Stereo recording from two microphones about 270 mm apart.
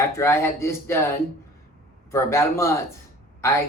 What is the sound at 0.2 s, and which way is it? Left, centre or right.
Speech, centre.